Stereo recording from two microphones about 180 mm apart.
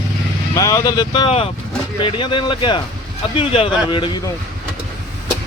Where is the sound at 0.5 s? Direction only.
20° left (ahead or behind).